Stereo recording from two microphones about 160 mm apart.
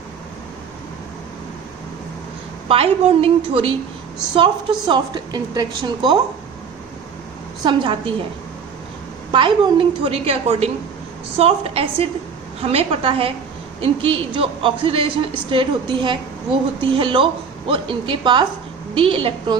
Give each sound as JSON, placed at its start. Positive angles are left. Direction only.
{"t": 2.6, "sound": "a woman's voice", "side_deg": -35}
{"t": 7.6, "sound": "a woman's voice", "side_deg": -30}
{"t": 9.3, "sound": "a woman's voice", "side_deg": -30}